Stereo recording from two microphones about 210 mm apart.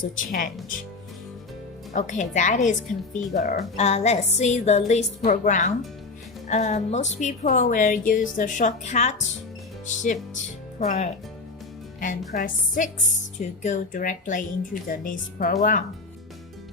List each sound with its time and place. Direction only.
0.0 s a woman's voice: 40° left (ahead or behind)
1.9 s a woman's voice: 35° left (ahead or behind)
9.8 s music: 35° left (ahead or behind)
10.8 s a woman's voice: 30° left (ahead or behind)